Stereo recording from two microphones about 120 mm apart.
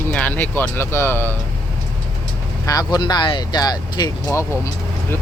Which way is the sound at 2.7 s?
35° left (ahead or behind).